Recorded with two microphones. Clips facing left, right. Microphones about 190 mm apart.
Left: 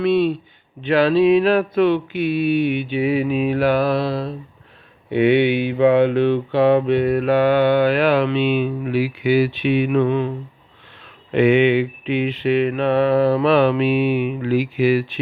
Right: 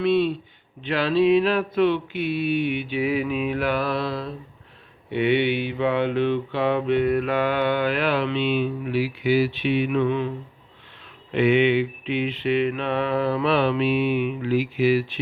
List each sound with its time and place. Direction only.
0.0 s speech: 45° left (ahead or behind)
0.9 s mantra: 45° left (ahead or behind)
2.3 s speech: 10° left (ahead or behind)
2.9 s mantra: 30° left (ahead or behind)
5.1 s mantra: 45° left (ahead or behind)
8.4 s speech: 55° left (ahead or behind)
9.6 s mantra: 55° left (ahead or behind)
13.8 s speech: 10° left (ahead or behind)
14.3 s speech: 60° left (ahead or behind)
14.8 s mantra: 50° left (ahead or behind)